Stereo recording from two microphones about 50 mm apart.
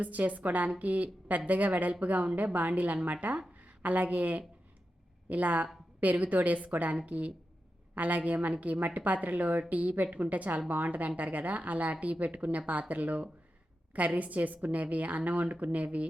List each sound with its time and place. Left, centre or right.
0.0 s a woman's voice: right